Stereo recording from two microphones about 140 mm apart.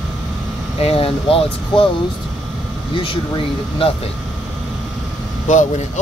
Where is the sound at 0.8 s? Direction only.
45° left (ahead or behind).